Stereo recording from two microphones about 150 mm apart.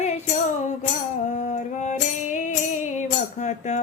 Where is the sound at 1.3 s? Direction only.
50° left (ahead or behind).